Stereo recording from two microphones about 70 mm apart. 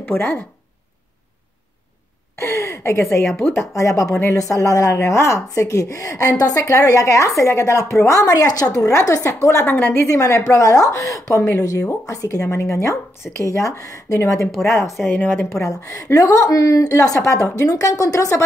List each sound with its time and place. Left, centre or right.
0.0 s speech: left
2.3 s a woman's voice: left
6.6 s a woman's voice: left
9.7 s a woman's voice: left
10.0 s a woman's voice: left